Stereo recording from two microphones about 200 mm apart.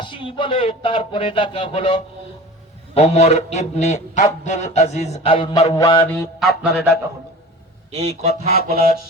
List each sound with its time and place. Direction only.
0.0 s a man's voice: 25° left (ahead or behind)
5.7 s music: 20° left (ahead or behind)
6.7 s a man's voice: 55° left (ahead or behind)
7.9 s speech: 30° right (ahead or behind)
8.1 s fowl: 55° left (ahead or behind)